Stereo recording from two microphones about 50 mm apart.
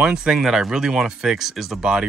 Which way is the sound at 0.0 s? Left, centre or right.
Centre.